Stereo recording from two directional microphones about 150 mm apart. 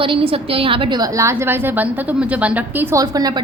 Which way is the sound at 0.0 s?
35° right (ahead or behind).